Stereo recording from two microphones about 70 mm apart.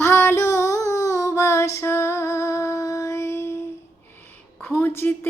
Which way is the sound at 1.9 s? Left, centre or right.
Left.